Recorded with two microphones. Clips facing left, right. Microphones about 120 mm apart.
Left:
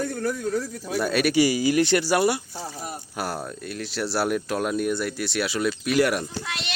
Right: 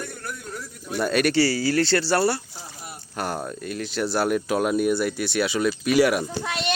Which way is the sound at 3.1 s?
Centre (ahead or behind).